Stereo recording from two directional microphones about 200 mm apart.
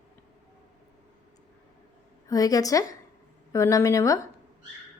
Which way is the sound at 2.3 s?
15° left (ahead or behind).